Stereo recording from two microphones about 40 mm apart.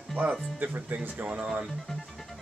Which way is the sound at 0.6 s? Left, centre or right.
Right.